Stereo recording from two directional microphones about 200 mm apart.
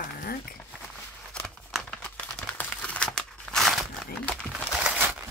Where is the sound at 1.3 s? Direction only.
5° left (ahead or behind).